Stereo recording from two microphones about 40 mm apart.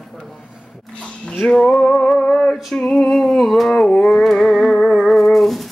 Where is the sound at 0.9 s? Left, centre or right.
Left.